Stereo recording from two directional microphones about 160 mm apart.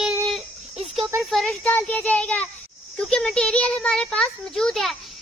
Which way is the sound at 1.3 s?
5° left (ahead or behind).